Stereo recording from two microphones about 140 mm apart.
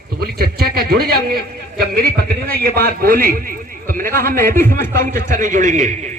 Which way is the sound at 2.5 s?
90° right.